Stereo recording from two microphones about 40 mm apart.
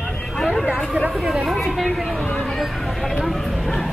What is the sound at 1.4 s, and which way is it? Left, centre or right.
Vehicle, centre.